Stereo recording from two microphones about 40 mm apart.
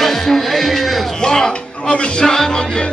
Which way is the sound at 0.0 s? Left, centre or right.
Centre.